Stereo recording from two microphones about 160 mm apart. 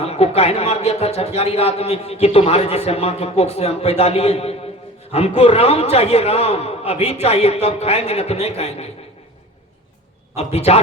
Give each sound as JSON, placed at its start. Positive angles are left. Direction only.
{"t": 0.0, "sound": "a man's voice", "side_deg": 40}
{"t": 10.3, "sound": "a man's voice", "side_deg": 40}